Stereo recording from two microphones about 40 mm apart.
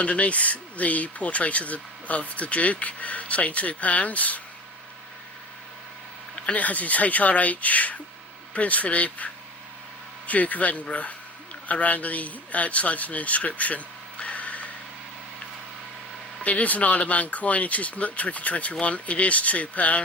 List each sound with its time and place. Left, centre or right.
0.0 s speech: left
6.3 s a man's voice: left
16.4 s speech: left